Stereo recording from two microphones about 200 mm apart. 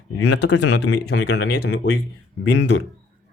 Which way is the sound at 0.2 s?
60° left (ahead or behind).